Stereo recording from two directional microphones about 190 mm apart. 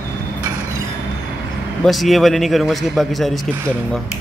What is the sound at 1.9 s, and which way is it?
A man's voice, centre (ahead or behind).